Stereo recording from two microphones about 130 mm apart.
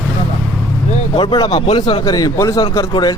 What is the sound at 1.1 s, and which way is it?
A man's voice, 40° left (ahead or behind).